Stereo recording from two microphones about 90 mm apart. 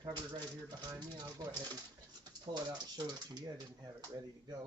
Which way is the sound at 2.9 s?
50° right (ahead or behind).